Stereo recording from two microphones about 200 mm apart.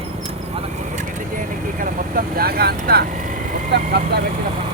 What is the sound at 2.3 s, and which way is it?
Speech, 50° right (ahead or behind).